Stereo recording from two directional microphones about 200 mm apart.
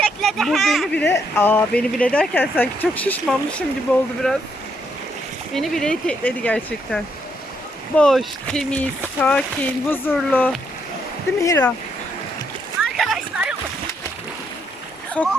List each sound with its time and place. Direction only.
0.0 s a child's voice: centre (ahead or behind)
5.5 s speech: centre (ahead or behind)
12.8 s a sound: centre (ahead or behind)
15.2 s speech: 5° left (ahead or behind)